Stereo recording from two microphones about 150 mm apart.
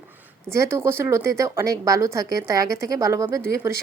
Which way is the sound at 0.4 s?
20° right (ahead or behind).